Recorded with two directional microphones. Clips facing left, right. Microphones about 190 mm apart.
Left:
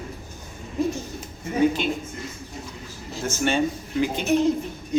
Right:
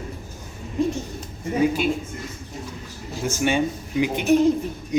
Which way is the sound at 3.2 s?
10° right (ahead or behind).